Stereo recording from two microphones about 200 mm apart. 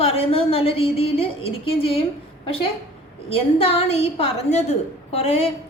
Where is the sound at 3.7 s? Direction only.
30° left (ahead or behind).